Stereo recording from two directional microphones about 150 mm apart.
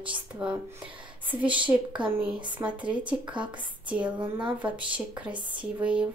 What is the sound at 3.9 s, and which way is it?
Speech, 10° right (ahead or behind).